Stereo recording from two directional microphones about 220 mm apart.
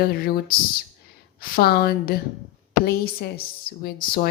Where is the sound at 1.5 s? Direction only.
45° left (ahead or behind).